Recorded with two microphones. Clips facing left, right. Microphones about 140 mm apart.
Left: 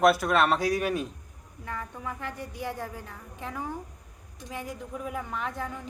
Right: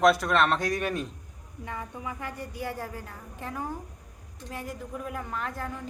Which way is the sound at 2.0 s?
10° right (ahead or behind).